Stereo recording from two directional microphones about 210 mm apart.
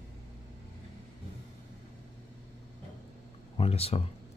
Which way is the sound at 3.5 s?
30° left (ahead or behind).